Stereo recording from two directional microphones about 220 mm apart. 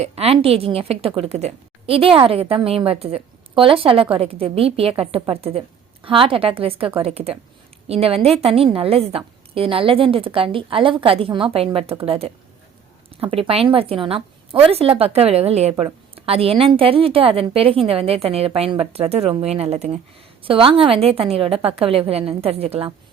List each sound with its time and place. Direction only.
0.0 s a woman's voice: 25° right (ahead or behind)